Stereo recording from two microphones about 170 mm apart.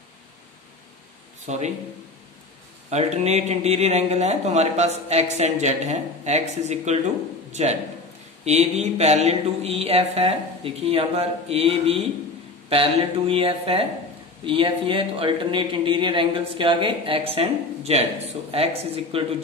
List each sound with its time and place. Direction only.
1.4 s speech: 45° right (ahead or behind)
2.9 s speech: 40° right (ahead or behind)